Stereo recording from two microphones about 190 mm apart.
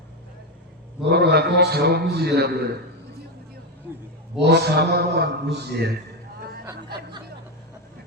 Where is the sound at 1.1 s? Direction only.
55° right (ahead or behind).